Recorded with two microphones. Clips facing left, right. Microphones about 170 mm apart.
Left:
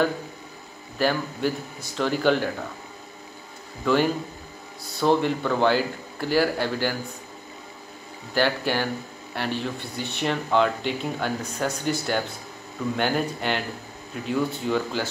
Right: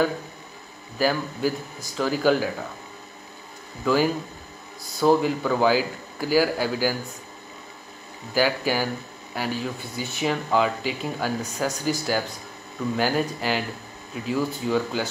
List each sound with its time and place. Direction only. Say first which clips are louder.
0.9 s speech: even; 5° right (ahead or behind)
3.8 s speech: even; 5° right (ahead or behind)
8.4 s speech: right 1 dB; 5° right (ahead or behind)